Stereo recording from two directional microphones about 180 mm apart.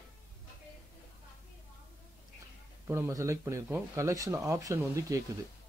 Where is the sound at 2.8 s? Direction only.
15° right (ahead or behind).